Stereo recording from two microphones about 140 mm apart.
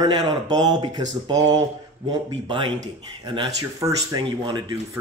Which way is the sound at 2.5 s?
35° right (ahead or behind).